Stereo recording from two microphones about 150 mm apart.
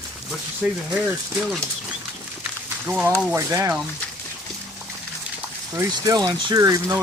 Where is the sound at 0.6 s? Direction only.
10° right (ahead or behind).